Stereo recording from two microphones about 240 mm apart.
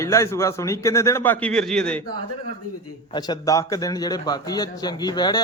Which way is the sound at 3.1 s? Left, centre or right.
Centre.